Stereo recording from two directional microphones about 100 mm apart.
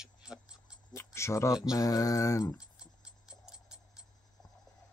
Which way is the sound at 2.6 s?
10° right (ahead or behind).